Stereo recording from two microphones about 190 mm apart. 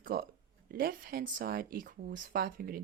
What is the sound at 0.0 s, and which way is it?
Speech, 50° right (ahead or behind).